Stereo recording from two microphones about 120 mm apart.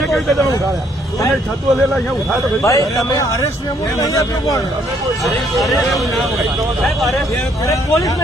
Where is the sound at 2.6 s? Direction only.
25° left (ahead or behind).